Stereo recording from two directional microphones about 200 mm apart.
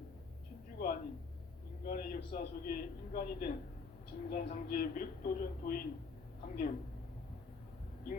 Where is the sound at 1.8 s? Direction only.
45° left (ahead or behind).